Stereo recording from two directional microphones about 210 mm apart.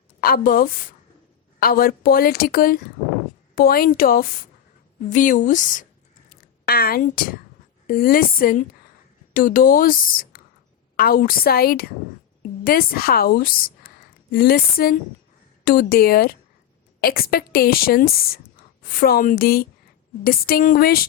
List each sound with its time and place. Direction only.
0.2 s a woman's voice: 45° left (ahead or behind)